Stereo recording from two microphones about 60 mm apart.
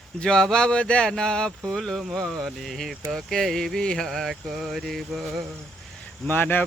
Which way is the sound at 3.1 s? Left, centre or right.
Centre.